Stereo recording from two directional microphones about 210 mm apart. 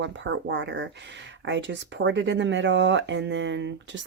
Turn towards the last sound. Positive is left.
turn(degrees=-60)  # may be behind; listen again after turning